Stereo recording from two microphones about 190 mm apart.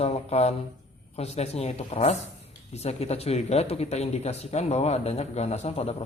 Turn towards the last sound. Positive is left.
turn(degrees=35)  # may be behind; listen again after turning